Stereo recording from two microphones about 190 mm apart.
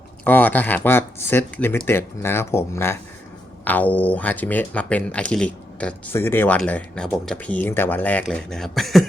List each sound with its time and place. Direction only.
0.3 s speech: 10° left (ahead or behind)